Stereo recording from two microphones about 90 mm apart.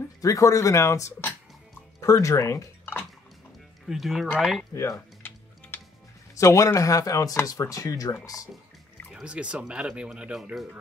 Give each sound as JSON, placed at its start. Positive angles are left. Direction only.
{"t": 0.2, "sound": "speech", "side_deg": 40}
{"t": 3.8, "sound": "speech", "side_deg": -5}
{"t": 4.7, "sound": "speech", "side_deg": 35}
{"t": 5.7, "sound": "music", "side_deg": 20}
{"t": 6.3, "sound": "speech", "side_deg": 35}
{"t": 9.1, "sound": "speech", "side_deg": -10}